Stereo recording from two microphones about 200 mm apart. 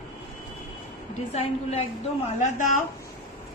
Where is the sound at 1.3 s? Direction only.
30° left (ahead or behind).